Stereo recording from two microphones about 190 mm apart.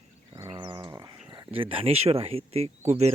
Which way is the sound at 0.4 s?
25° right (ahead or behind).